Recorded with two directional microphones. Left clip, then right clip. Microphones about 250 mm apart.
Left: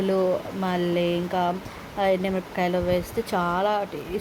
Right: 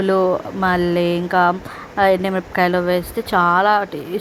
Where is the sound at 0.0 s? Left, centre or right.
Centre.